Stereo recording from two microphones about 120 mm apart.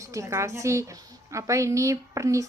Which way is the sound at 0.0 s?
25° right (ahead or behind).